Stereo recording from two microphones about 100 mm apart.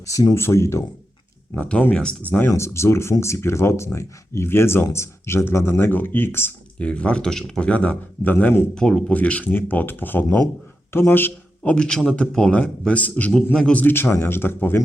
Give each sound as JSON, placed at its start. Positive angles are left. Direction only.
{"t": 0.1, "sound": "speech", "side_deg": 35}
{"t": 0.3, "sound": "speech", "side_deg": 25}
{"t": 1.5, "sound": "speech", "side_deg": 15}
{"t": 2.5, "sound": "speech", "side_deg": 30}
{"t": 6.8, "sound": "speech", "side_deg": 10}
{"t": 8.7, "sound": "speech", "side_deg": 5}
{"t": 13.8, "sound": "speech", "side_deg": 25}